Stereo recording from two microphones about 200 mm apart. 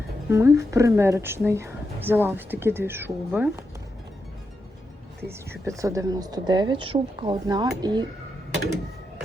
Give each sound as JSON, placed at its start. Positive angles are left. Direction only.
{"t": 0.3, "sound": "speech", "side_deg": -15}
{"t": 5.6, "sound": "speech", "side_deg": -15}